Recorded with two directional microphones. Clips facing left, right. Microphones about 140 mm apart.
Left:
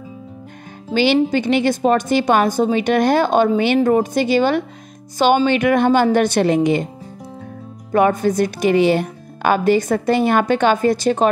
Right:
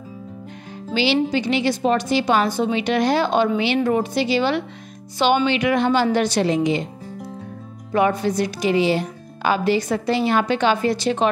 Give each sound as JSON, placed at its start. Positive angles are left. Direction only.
{"t": 0.9, "sound": "a woman's voice", "side_deg": 50}
{"t": 7.9, "sound": "a woman's voice", "side_deg": 50}